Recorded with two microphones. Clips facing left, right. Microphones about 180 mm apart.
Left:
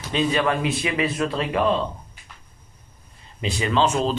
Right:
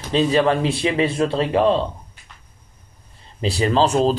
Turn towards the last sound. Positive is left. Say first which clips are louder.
# right 4 dB
turn(degrees=-35)  # may be behind; listen again after turning